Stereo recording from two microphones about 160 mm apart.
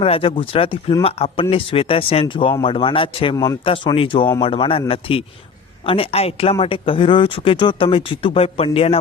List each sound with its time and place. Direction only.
0.0 s speech: 35° left (ahead or behind)
3.3 s speech: 20° left (ahead or behind)
3.6 s speech: 35° left (ahead or behind)